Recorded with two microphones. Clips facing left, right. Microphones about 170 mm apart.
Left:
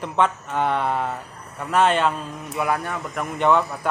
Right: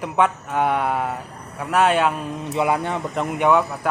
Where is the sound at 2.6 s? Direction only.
25° right (ahead or behind).